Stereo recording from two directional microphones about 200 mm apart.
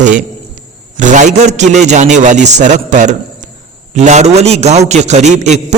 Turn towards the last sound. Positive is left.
turn(degrees=-35)  # may be behind; listen again after turning